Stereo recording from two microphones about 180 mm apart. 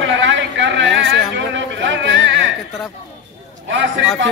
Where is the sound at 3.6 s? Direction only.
90° right.